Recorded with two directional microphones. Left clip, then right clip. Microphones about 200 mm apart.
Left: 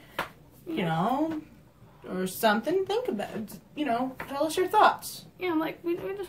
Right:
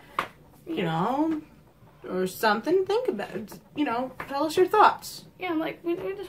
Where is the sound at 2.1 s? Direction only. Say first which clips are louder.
Right 1 dB; 20° right (ahead or behind).